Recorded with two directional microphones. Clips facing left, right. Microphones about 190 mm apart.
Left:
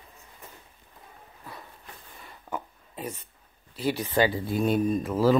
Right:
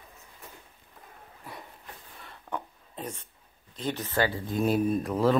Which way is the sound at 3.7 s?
10° left (ahead or behind).